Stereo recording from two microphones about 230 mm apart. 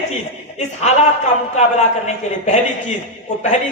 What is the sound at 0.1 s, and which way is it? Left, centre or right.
A man's voice, left.